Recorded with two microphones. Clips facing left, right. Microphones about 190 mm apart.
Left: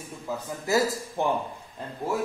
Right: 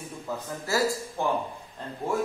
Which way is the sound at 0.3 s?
5° left (ahead or behind).